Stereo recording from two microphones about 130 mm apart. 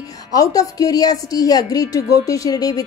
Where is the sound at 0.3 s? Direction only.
25° left (ahead or behind).